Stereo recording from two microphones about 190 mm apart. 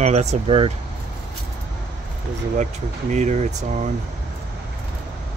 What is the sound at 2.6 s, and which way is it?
Speech, 40° right (ahead or behind).